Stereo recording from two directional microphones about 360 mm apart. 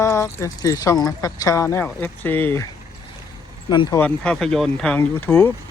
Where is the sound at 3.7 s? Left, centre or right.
Centre.